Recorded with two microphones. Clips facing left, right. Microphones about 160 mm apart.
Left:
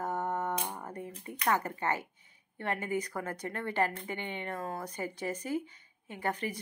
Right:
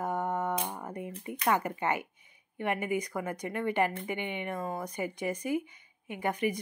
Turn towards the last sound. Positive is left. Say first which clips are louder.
# right 4 dB
turn(degrees=-15)  # may be behind; listen again after turning